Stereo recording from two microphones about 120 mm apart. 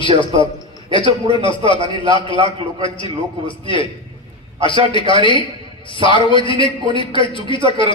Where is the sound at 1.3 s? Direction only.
45° left (ahead or behind).